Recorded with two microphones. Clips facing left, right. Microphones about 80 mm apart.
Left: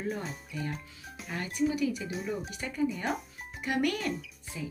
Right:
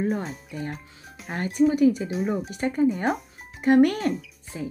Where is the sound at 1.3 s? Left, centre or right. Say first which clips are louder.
Right 9 dB; right.